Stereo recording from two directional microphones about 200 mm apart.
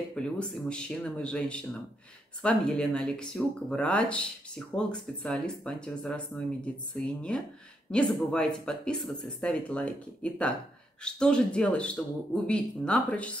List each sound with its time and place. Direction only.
0.1 s speech: 5° left (ahead or behind)